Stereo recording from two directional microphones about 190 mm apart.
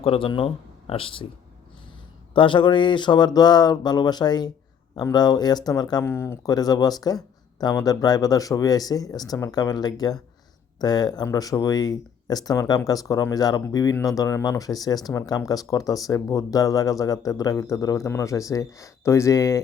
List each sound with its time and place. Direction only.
0.0 s speech: 30° left (ahead or behind)
2.3 s speech: 25° left (ahead or behind)